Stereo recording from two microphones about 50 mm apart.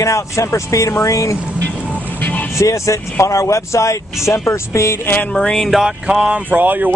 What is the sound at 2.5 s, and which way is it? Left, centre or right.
Speech, left.